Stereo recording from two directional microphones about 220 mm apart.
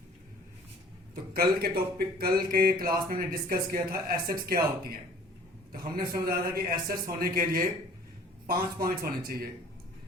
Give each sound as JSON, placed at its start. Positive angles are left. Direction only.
{"t": 1.1, "sound": "speech", "side_deg": -40}
{"t": 6.2, "sound": "speech", "side_deg": -40}